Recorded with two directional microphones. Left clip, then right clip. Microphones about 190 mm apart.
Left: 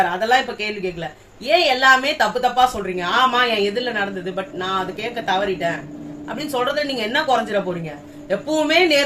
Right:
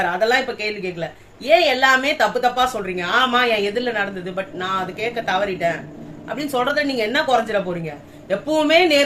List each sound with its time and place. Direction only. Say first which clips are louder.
0.0 s a woman's voice: left 1 dB; 20° right (ahead or behind)